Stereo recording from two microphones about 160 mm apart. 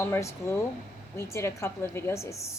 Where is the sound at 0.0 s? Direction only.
15° left (ahead or behind).